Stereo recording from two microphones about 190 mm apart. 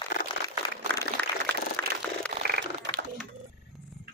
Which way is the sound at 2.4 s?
55° right (ahead or behind).